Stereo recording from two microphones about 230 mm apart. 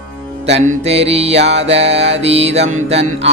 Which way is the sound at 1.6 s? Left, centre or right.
Right.